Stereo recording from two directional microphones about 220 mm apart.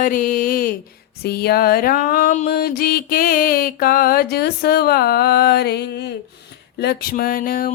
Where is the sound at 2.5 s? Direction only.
45° left (ahead or behind).